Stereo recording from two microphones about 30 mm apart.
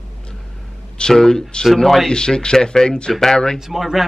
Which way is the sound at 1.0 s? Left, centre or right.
Left.